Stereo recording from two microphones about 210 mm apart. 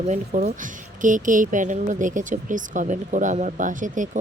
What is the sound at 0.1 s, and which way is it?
Speech, 40° right (ahead or behind).